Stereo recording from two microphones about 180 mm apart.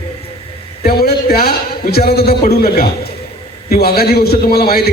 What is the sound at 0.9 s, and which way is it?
A man's voice, 60° left (ahead or behind).